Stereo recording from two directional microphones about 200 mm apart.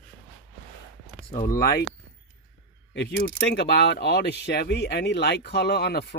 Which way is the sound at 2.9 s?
55° left (ahead or behind).